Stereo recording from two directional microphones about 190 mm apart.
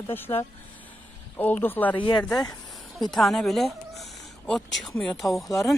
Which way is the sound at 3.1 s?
Centre (ahead or behind).